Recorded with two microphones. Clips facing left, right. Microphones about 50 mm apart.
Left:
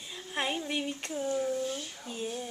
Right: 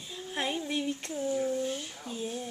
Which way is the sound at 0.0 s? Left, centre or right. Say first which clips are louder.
Even; centre.